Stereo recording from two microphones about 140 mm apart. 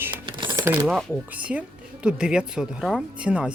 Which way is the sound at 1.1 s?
10° right (ahead or behind).